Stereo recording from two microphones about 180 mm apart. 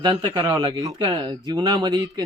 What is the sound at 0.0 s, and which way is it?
A man's voice, 20° right (ahead or behind).